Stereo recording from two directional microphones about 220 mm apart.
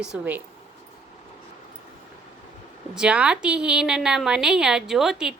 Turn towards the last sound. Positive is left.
turn(degrees=0)  # may be behind; listen again after turning